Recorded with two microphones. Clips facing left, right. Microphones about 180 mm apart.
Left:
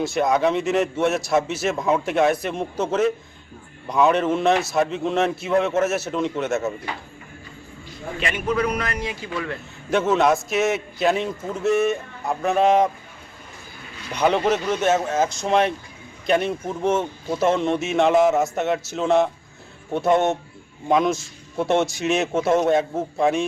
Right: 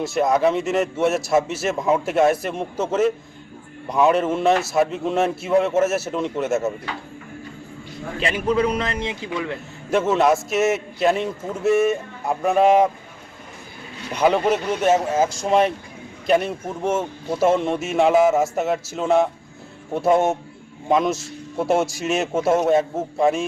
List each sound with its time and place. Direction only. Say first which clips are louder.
0.0 s a man's voice: right 1 dB; centre (ahead or behind)
8.2 s a man's voice: right 3 dB; 30° right (ahead or behind)
9.9 s a man's voice: right 1 dB; 5° right (ahead or behind)
14.1 s a man's voice: right 1 dB; 5° right (ahead or behind)